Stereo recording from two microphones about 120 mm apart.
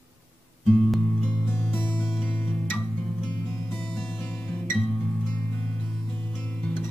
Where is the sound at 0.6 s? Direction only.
5° left (ahead or behind).